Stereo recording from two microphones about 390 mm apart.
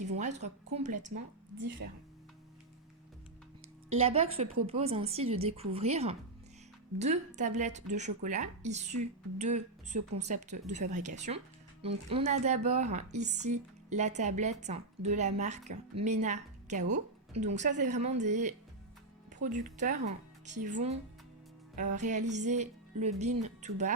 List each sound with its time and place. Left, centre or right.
0.0 s speech: centre
3.9 s speech: centre